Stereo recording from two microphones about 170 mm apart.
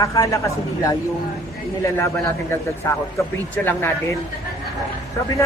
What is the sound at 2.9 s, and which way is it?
A woman's voice, 20° left (ahead or behind).